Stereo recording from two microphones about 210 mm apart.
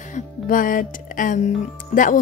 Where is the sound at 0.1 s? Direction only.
40° left (ahead or behind).